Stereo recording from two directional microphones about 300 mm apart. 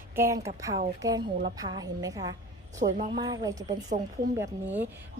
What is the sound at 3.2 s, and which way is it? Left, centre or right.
Speech, centre.